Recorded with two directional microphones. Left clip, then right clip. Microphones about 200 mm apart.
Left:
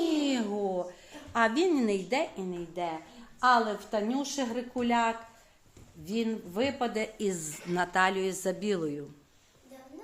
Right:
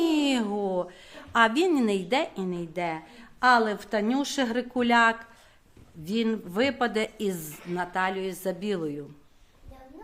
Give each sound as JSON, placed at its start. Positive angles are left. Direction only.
{"t": 0.1, "sound": "a sound", "side_deg": -25}
{"t": 1.3, "sound": "a woman's voice", "side_deg": -20}
{"t": 7.2, "sound": "a woman's voice", "side_deg": -10}
{"t": 7.7, "sound": "a woman's voice", "side_deg": 5}